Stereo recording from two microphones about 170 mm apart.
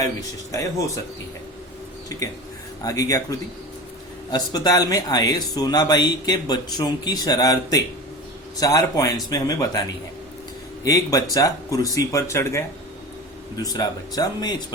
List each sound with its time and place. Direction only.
0.5 s speech: 20° left (ahead or behind)
2.0 s speech: 20° left (ahead or behind)
10.8 s speech: 20° left (ahead or behind)